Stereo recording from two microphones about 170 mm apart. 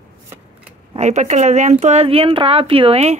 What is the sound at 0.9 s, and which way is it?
Speech, 40° right (ahead or behind).